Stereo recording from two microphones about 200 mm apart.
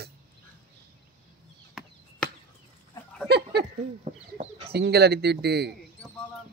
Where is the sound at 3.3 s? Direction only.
55° right (ahead or behind).